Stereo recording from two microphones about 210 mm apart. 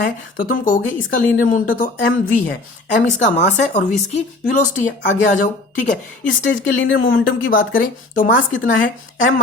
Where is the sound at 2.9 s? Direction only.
35° left (ahead or behind).